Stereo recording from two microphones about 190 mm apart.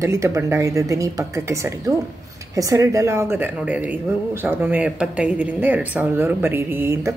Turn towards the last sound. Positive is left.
turn(degrees=-15)  # may be behind; listen again after turning